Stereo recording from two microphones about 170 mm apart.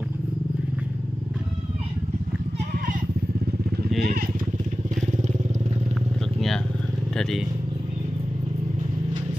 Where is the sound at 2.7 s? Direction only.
55° right (ahead or behind).